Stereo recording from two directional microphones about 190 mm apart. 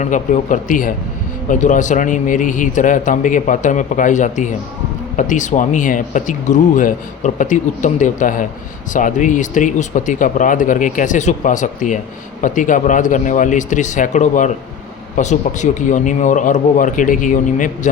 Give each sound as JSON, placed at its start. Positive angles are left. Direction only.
{"t": 0.0, "sound": "a man's voice", "side_deg": 40}